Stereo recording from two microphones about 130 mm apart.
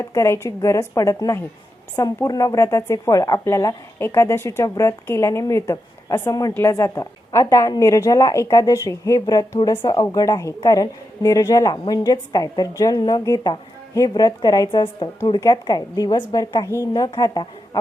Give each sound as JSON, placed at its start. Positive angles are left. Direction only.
{"t": 0.0, "sound": "a woman's voice", "side_deg": 20}